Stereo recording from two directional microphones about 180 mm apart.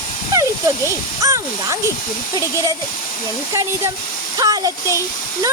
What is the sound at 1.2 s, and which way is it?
Speech, 20° right (ahead or behind).